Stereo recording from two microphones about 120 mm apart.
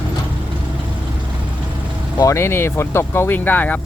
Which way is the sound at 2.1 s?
25° left (ahead or behind).